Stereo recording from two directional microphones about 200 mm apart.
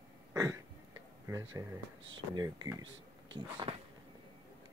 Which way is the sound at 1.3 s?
15° right (ahead or behind).